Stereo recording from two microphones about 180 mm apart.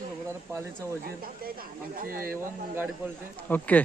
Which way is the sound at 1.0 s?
55° right (ahead or behind).